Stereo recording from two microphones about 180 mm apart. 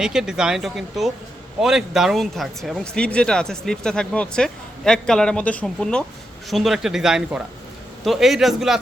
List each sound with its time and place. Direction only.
0.0 s speech: 5° right (ahead or behind)